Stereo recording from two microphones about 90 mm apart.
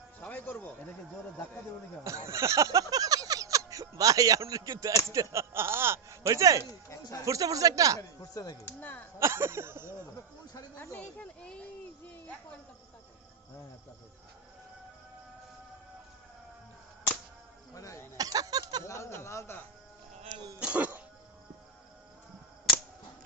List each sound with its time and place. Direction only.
0.2 s music: 20° left (ahead or behind)
2.0 s speech: 30° right (ahead or behind)
6.6 s speech: 40° left (ahead or behind)
7.3 s speech: 40° right (ahead or behind)
7.9 s speech: 45° left (ahead or behind)
8.6 s speech: 20° left (ahead or behind)
9.1 s a sound: 30° right (ahead or behind)
10.9 s speech: 15° left (ahead or behind)
17.7 s speech: 35° left (ahead or behind)
18.2 s a sound: 45° right (ahead or behind)
18.9 s speech: 30° left (ahead or behind)
20.6 s speech: 15° right (ahead or behind)